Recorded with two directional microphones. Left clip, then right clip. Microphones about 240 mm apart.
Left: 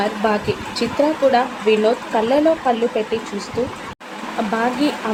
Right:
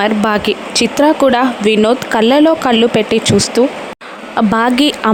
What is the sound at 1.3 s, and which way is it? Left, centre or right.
Speech, right.